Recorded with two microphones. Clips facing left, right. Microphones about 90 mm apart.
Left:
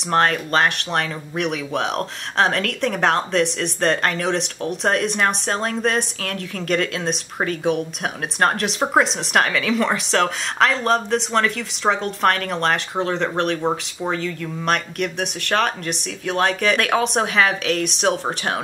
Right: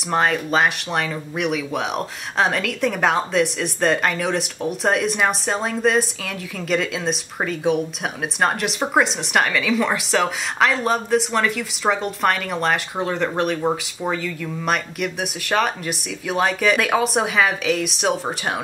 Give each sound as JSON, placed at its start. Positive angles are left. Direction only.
{"t": 0.1, "sound": "speech", "side_deg": -5}